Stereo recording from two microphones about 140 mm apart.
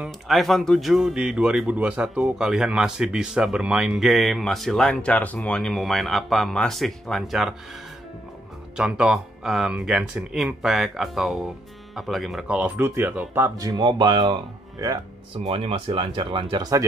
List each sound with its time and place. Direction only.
0.0 s speech: centre (ahead or behind)
8.7 s speech: 5° right (ahead or behind)
13.7 s speech: 35° right (ahead or behind)
15.3 s speech: 40° right (ahead or behind)